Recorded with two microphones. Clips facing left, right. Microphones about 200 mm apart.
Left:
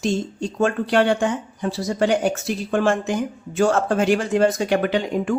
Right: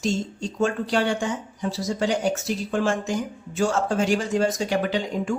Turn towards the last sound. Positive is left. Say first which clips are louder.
# left 4 dB
turn(degrees=60)  # may be behind; listen again after turning